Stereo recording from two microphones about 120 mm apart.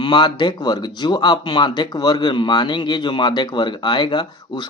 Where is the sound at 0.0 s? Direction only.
40° left (ahead or behind).